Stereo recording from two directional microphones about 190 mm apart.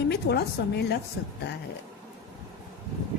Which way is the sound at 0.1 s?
60° left (ahead or behind).